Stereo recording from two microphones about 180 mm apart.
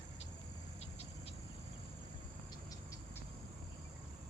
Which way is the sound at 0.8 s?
35° left (ahead or behind).